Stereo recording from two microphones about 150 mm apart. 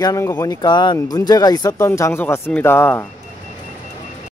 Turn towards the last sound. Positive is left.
turn(degrees=15)  # may be behind; listen again after turning